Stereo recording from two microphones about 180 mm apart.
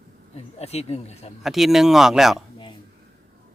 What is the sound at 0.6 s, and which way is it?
Speech, 35° left (ahead or behind).